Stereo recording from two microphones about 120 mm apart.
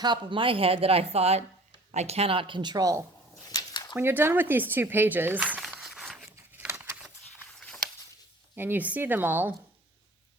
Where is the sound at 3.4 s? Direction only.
35° left (ahead or behind).